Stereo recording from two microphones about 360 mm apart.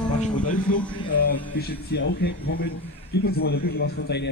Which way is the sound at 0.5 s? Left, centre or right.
Left.